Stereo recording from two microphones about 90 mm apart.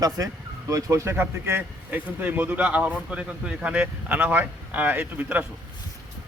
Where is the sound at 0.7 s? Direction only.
40° right (ahead or behind).